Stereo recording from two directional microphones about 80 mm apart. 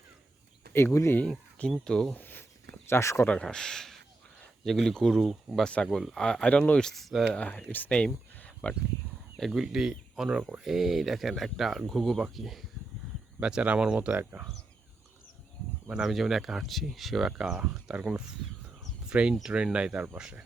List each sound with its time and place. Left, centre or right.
1.0 s speech: left
1.7 s speech: centre
2.1 s a sound: left
2.9 s speech: left
3.4 s speech: centre
7.3 s speech: centre
9.5 s speech: centre
13.4 s speech: centre
15.9 s speech: centre